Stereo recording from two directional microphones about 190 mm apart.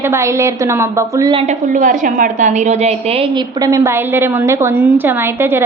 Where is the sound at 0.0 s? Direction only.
15° right (ahead or behind).